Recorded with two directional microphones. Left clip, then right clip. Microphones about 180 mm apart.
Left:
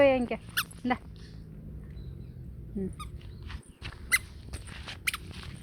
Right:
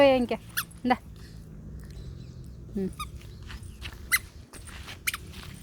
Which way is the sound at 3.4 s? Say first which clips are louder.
Right 2 dB; 40° left (ahead or behind).